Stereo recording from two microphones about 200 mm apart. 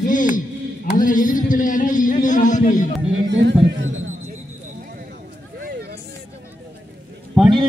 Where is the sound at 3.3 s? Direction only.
60° right (ahead or behind).